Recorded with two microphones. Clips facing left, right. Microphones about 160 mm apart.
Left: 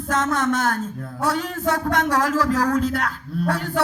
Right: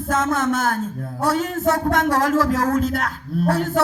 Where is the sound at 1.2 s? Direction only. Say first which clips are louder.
Right 3 dB; 50° right (ahead or behind).